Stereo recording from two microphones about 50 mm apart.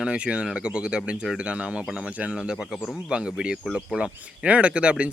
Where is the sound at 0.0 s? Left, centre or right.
Right.